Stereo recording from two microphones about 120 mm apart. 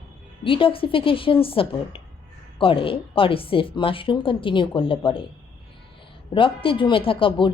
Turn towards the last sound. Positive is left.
turn(degrees=45)  # may be behind; listen again after turning